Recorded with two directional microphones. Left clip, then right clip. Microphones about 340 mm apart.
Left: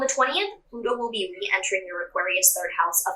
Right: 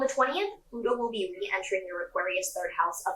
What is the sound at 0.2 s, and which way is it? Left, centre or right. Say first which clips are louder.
Speech: left 4 dB; centre.